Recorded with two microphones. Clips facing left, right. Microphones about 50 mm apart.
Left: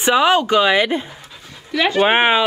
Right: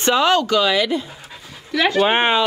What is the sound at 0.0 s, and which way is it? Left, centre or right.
Speech, centre.